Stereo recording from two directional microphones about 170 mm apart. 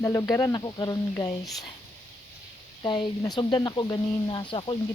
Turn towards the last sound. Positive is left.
turn(degrees=30)  # may be behind; listen again after turning